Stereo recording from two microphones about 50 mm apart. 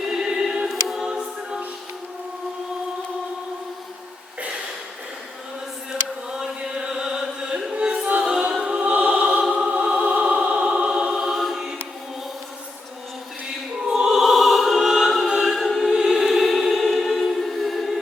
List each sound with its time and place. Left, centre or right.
0.0 s opera: centre
0.7 s music: centre
1.1 s music: centre
5.9 s chant: centre
7.7 s music: centre
8.2 s choir: centre
9.5 s music: right
10.2 s choir: centre
13.8 s opera: centre
14.8 s choir: centre
15.5 s music: centre
16.0 s choir: centre